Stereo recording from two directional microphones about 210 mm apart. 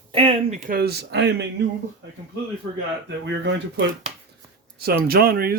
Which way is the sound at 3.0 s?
55° right (ahead or behind).